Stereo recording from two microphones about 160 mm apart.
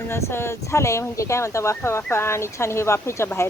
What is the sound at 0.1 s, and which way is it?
Speech, 15° left (ahead or behind).